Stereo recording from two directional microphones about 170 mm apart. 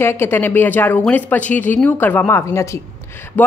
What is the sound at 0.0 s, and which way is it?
Speech, 15° left (ahead or behind).